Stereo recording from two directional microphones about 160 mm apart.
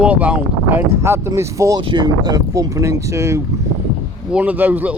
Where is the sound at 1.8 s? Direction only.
30° right (ahead or behind).